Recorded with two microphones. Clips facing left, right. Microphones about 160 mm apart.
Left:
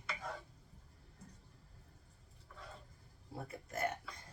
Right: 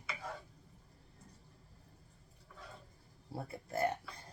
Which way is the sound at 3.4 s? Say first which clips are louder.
Right 4 dB; 30° right (ahead or behind).